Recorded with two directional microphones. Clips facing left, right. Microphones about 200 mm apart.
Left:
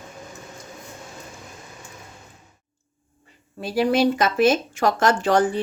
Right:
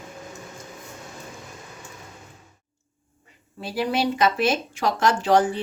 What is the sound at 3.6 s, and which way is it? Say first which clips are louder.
Speech: left 5 dB; 45° left (ahead or behind).